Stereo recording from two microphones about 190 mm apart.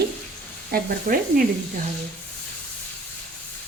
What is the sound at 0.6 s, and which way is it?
Speech, 50° right (ahead or behind).